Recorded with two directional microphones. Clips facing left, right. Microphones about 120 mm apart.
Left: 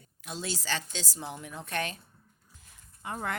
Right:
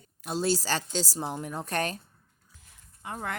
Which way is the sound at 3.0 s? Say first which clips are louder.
Left 1 dB; 25° right (ahead or behind).